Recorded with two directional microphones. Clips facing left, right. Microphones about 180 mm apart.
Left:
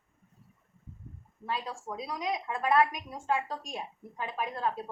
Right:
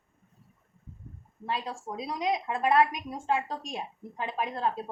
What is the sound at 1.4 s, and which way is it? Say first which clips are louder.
A woman's voice: right 2 dB; 25° right (ahead or behind).